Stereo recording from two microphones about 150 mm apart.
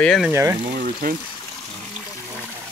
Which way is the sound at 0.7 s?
70° right (ahead or behind).